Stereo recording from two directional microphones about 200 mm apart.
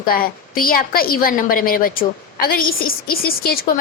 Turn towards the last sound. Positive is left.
turn(degrees=50)  # may be behind; listen again after turning